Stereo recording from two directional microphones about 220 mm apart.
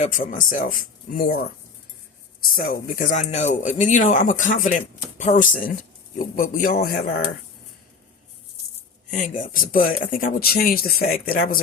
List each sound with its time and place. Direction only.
0.0 s speech: 35° left (ahead or behind)
2.6 s speech: 40° left (ahead or behind)
9.0 s speech: 35° left (ahead or behind)